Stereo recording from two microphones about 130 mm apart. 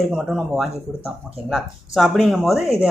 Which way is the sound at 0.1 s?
Centre (ahead or behind).